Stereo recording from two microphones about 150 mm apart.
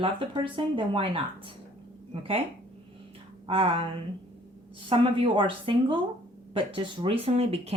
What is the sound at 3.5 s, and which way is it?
Speech, 35° right (ahead or behind).